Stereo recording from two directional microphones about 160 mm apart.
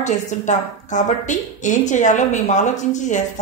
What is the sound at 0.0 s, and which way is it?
A woman's voice, 50° left (ahead or behind).